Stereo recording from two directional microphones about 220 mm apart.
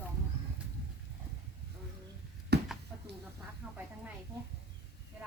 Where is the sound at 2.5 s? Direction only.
45° right (ahead or behind).